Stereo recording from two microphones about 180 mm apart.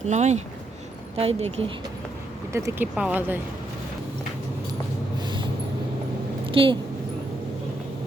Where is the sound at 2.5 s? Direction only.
15° right (ahead or behind).